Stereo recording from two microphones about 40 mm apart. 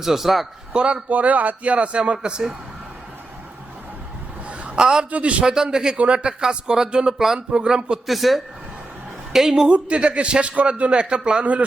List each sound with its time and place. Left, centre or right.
0.0 s a man's voice: centre
0.7 s speech: right
1.1 s a man's voice: right
4.4 s a sound: right
4.8 s a man's voice: centre
5.1 s a man's voice: right
5.7 s a man's voice: centre
8.0 s a man's voice: centre
9.6 s a man's voice: right
10.9 s speech: centre